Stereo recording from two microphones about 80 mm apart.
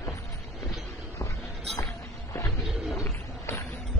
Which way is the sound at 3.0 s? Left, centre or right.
Left.